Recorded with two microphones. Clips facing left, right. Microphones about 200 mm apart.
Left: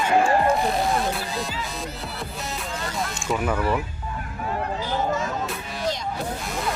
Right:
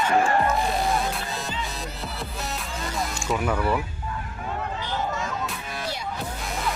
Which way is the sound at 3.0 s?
Centre (ahead or behind).